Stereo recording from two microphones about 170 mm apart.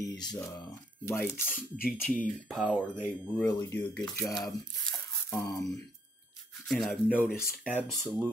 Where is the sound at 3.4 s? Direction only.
15° left (ahead or behind).